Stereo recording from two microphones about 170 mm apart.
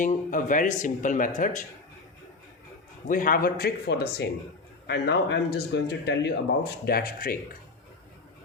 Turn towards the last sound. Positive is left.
turn(degrees=60)  # may be behind; listen again after turning